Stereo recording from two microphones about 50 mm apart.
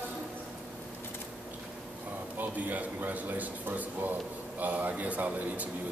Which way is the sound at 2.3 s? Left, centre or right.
Right.